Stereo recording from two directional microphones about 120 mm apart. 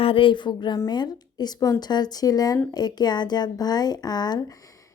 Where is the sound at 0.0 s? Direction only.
50° left (ahead or behind).